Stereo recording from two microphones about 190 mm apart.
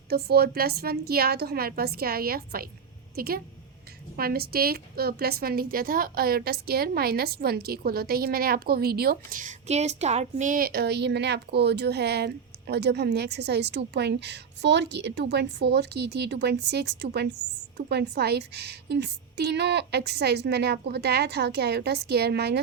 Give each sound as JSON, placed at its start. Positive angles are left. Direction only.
{"t": 0.1, "sound": "a woman's voice", "side_deg": -55}